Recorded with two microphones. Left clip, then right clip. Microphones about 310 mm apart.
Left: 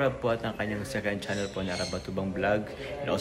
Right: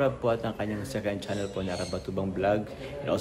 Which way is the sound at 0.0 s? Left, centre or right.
Centre.